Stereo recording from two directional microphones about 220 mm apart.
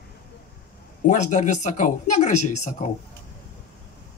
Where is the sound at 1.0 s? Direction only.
35° left (ahead or behind).